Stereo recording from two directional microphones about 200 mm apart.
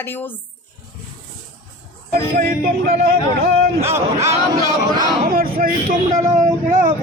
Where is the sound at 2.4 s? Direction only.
45° right (ahead or behind).